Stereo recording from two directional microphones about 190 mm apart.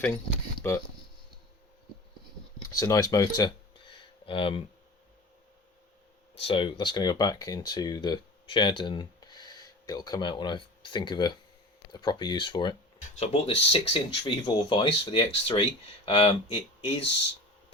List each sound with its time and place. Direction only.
0.6 s speech: 10° left (ahead or behind)
2.6 s speech: 15° left (ahead or behind)
6.3 s speech: 30° left (ahead or behind)